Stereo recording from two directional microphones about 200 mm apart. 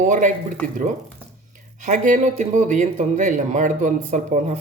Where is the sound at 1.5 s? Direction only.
40° right (ahead or behind).